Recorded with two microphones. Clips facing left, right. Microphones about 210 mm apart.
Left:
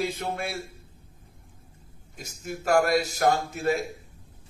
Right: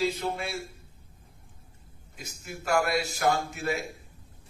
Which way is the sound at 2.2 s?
40° left (ahead or behind).